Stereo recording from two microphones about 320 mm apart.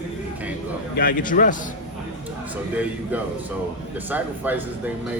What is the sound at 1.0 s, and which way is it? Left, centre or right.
Speech, left.